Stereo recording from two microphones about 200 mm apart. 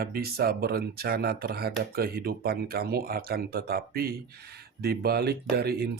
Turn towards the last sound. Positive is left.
turn(degrees=-50)  # may be behind; listen again after turning